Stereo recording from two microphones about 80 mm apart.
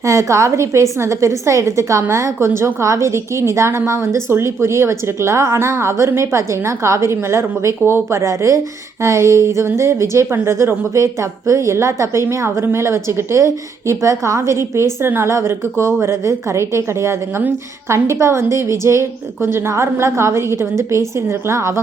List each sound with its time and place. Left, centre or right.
0.0 s a woman's voice: right